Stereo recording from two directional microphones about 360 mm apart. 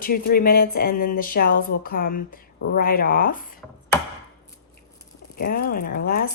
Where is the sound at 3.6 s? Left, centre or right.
Centre.